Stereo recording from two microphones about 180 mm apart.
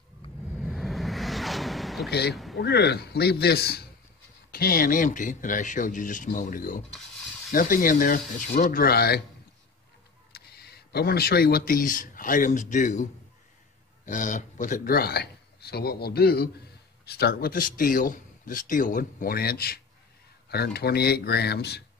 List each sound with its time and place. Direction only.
0.5 s a sound: centre (ahead or behind)
2.0 s speech: 65° left (ahead or behind)
10.3 s speech: 60° left (ahead or behind)